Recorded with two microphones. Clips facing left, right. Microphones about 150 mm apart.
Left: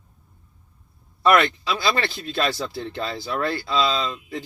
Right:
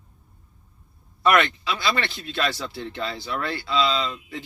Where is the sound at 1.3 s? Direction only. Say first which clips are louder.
Left 3 dB; 35° left (ahead or behind).